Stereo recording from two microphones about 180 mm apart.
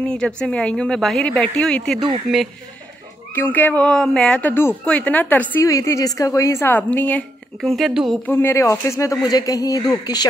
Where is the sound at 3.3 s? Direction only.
10° left (ahead or behind).